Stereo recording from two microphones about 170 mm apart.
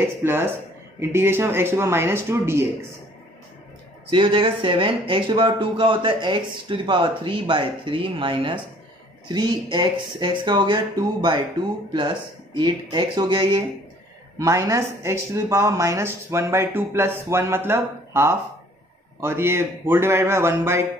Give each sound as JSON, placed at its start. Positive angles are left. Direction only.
{"t": 0.0, "sound": "speech", "side_deg": -15}
{"t": 4.1, "sound": "speech", "side_deg": -30}